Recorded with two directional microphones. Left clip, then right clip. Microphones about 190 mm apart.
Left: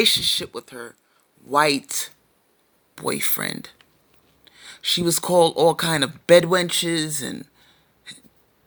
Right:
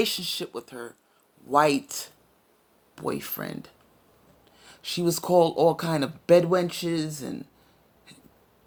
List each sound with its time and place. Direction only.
0.0 s speech: 25° left (ahead or behind)